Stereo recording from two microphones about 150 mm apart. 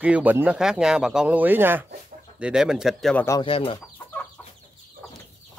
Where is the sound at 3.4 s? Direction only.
35° left (ahead or behind).